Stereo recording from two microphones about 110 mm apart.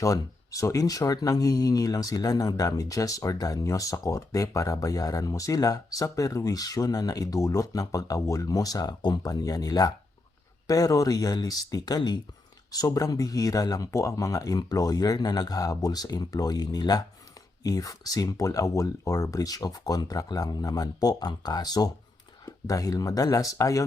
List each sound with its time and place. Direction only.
0.0 s speech: 30° left (ahead or behind)